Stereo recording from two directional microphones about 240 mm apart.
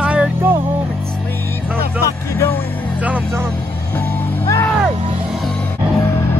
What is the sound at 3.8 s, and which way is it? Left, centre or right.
Music, centre.